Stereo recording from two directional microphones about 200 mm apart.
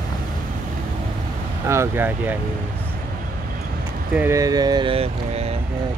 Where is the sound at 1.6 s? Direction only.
15° right (ahead or behind).